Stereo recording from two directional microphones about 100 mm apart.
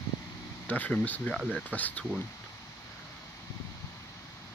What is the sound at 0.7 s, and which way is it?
Speech, 15° left (ahead or behind).